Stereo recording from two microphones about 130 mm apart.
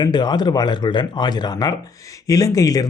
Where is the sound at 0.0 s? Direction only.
35° left (ahead or behind).